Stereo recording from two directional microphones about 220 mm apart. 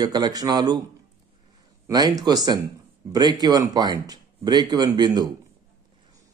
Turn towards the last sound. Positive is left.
turn(degrees=-20)  # may be behind; listen again after turning